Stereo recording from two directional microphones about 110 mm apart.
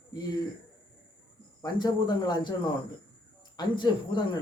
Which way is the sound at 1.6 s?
40° left (ahead or behind).